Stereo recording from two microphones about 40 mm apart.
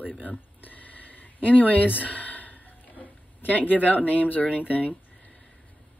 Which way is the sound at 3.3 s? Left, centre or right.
Left.